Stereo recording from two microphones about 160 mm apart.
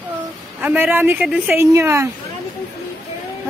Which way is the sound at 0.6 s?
10° right (ahead or behind).